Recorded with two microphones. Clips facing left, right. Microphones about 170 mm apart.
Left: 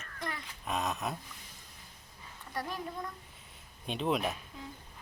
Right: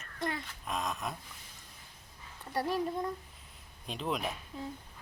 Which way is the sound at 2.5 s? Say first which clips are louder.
Right 6 dB; 30° right (ahead or behind).